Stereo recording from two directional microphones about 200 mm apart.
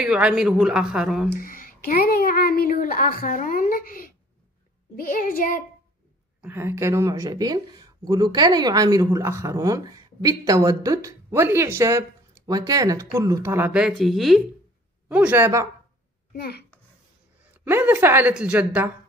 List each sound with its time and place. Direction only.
0.0 s speech: 5° right (ahead or behind)
1.4 s a woman's voice: 45° left (ahead or behind)
6.4 s speech: 10° right (ahead or behind)
16.3 s a child's voice: 50° left (ahead or behind)
17.6 s speech: 10° right (ahead or behind)